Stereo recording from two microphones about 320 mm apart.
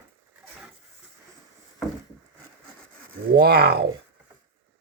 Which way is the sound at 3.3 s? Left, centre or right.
Right.